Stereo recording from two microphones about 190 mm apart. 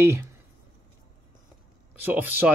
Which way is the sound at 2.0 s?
10° right (ahead or behind).